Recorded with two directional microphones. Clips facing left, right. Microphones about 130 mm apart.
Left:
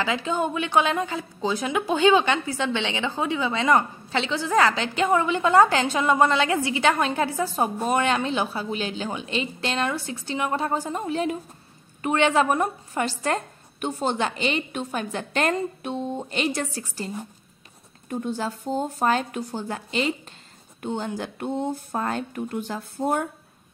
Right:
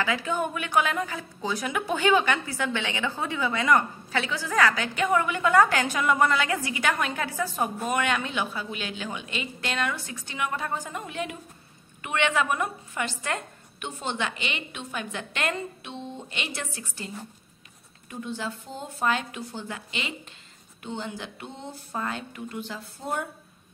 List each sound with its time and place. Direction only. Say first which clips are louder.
0.0 s a woman's voice: left 2 dB; 25° left (ahead or behind)
18.1 s a woman's voice: left 6 dB; 45° left (ahead or behind)